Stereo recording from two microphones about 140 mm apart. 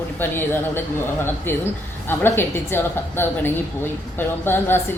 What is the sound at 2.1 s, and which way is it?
Speech, 15° left (ahead or behind).